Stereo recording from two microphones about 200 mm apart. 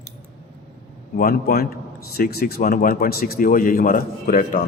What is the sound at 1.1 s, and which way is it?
A man's voice, 50° left (ahead or behind).